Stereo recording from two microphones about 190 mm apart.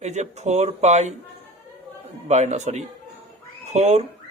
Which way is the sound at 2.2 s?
35° right (ahead or behind).